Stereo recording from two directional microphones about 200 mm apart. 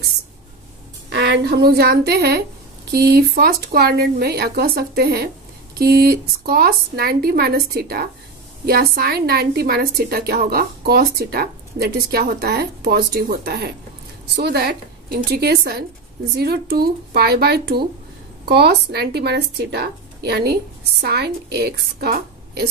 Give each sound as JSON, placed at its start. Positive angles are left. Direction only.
{"t": 1.1, "sound": "a woman's voice", "side_deg": -55}